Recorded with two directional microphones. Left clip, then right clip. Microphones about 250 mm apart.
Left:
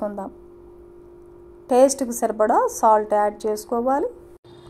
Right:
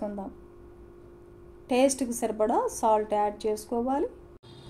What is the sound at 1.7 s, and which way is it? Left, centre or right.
A woman's voice, left.